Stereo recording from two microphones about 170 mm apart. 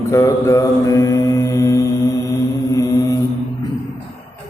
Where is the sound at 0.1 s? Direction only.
15° left (ahead or behind).